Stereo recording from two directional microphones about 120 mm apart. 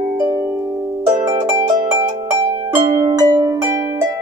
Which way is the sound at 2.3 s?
25° right (ahead or behind).